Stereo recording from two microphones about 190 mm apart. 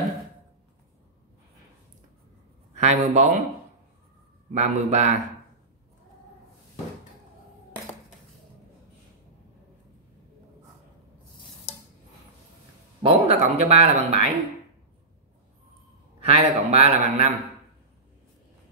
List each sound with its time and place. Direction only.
2.7 s speech: 35° right (ahead or behind)
4.6 s speech: 35° right (ahead or behind)
13.0 s speech: 30° right (ahead or behind)
16.2 s speech: 35° right (ahead or behind)